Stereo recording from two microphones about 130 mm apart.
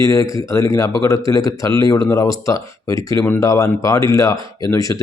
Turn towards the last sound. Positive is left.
turn(degrees=25)  # may be behind; listen again after turning